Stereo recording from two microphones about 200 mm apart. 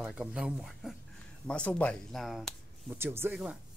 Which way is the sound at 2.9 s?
10° right (ahead or behind).